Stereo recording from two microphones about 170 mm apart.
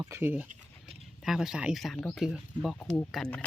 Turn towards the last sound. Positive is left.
turn(degrees=5)  # may be behind; listen again after turning